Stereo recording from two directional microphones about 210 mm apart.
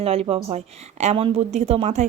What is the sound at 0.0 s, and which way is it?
A woman's voice, 30° right (ahead or behind).